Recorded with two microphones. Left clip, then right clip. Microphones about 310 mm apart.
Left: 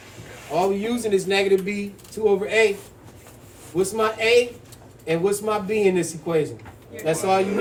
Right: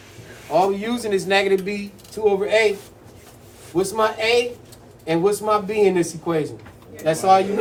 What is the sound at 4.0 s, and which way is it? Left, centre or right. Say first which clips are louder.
Speech: even; centre.